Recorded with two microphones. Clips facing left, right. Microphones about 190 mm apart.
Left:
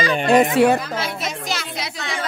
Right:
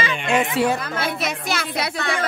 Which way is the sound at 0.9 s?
55° right (ahead or behind).